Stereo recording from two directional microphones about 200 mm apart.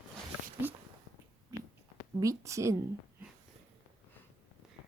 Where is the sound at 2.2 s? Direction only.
15° right (ahead or behind).